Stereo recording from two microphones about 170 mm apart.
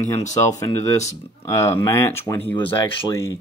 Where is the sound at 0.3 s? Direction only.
20° left (ahead or behind).